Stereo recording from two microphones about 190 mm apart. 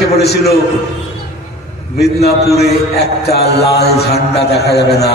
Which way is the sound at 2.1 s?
55° left (ahead or behind).